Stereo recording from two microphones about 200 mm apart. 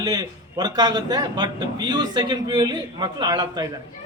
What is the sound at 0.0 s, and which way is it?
A man's voice, 20° right (ahead or behind).